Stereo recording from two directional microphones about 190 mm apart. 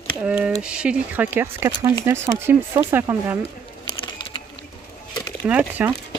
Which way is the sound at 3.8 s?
20° left (ahead or behind).